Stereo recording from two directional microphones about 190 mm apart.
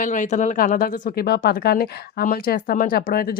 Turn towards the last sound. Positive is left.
turn(degrees=50)  # may be behind; listen again after turning